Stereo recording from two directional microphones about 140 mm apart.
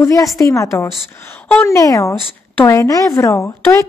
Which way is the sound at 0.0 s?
25° left (ahead or behind).